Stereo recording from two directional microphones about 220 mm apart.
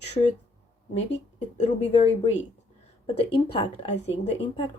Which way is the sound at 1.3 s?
30° left (ahead or behind).